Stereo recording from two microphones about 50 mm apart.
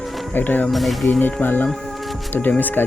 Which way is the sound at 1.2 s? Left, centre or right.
Left.